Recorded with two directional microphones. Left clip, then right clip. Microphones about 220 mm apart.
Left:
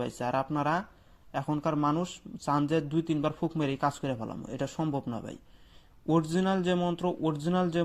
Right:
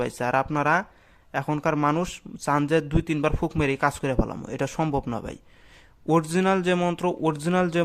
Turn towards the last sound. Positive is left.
turn(degrees=-25)  # may be behind; listen again after turning